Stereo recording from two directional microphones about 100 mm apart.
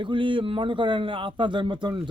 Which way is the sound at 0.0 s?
55° right (ahead or behind).